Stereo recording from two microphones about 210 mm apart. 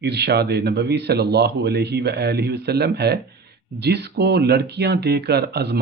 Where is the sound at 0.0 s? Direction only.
50° right (ahead or behind).